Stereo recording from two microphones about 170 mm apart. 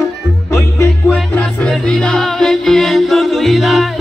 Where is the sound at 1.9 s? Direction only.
5° left (ahead or behind).